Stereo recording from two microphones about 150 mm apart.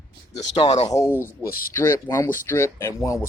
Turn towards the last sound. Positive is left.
turn(degrees=20)  # may be behind; listen again after turning